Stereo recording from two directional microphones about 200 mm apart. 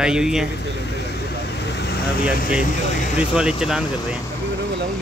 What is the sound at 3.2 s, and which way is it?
A man's voice, 5° right (ahead or behind).